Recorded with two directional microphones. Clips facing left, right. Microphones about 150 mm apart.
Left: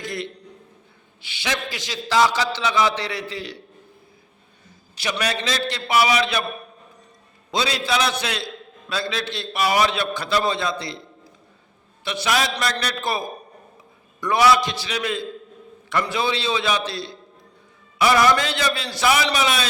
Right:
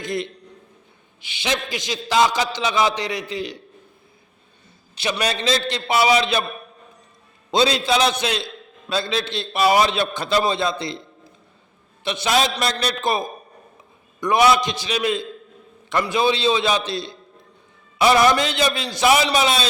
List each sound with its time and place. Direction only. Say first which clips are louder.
0.0 s a man's voice: right 4 dB; 20° right (ahead or behind)
4.9 s a man's voice: right 2 dB; 25° right (ahead or behind)
7.5 s a man's voice: right 4 dB; 25° right (ahead or behind)